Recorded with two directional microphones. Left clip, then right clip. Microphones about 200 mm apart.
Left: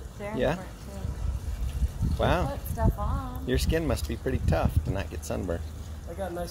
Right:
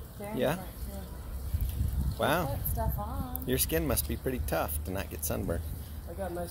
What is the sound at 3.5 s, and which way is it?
Speech, 5° left (ahead or behind).